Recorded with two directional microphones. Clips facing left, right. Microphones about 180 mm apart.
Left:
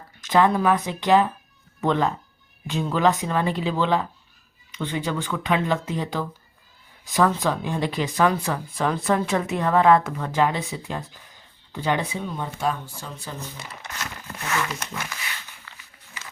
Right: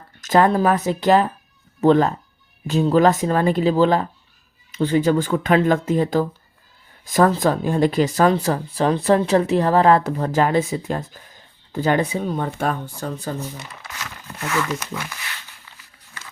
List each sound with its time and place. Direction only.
0.2 s speech: 45° right (ahead or behind)
14.3 s speech: 5° left (ahead or behind)